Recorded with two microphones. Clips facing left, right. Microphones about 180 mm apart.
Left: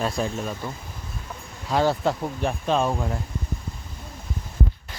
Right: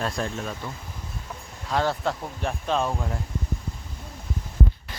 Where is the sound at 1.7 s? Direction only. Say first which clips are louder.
Left 3 dB; 5° left (ahead or behind).